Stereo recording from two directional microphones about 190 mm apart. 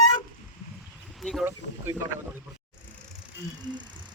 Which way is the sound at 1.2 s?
Centre (ahead or behind).